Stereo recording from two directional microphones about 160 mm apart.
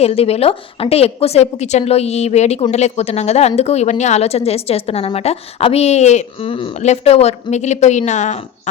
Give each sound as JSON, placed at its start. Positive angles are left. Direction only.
{"t": 0.0, "sound": "a woman's voice", "side_deg": 40}